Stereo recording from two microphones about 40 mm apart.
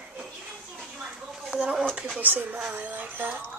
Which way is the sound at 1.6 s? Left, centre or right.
Right.